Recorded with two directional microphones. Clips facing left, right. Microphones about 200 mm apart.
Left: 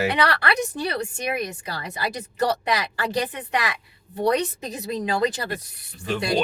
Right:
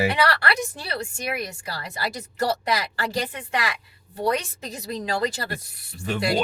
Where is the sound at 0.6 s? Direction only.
20° left (ahead or behind).